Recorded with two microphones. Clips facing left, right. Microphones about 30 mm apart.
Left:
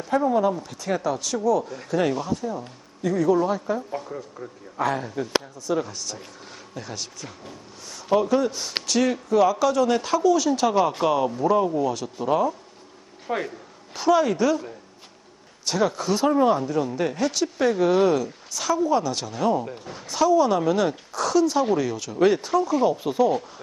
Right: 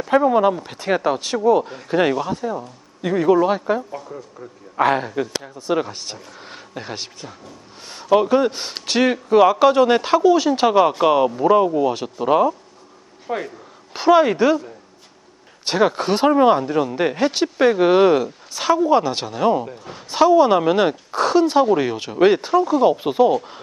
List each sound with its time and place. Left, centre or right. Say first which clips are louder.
0.1 s speech: right 5 dB; right
3.9 s a man's voice: even; centre
4.8 s speech: right 7 dB; right
13.2 s a man's voice: right 2 dB; centre
13.9 s speech: right 6 dB; right
15.6 s speech: right 5 dB; right
19.8 s a woman's voice: right 2 dB; centre
20.1 s speech: right 6 dB; right